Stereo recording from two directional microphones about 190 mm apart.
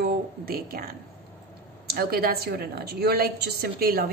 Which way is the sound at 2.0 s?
50° right (ahead or behind).